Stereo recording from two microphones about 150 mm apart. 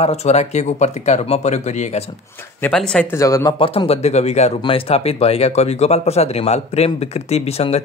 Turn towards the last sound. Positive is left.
turn(degrees=45)  # may be behind; listen again after turning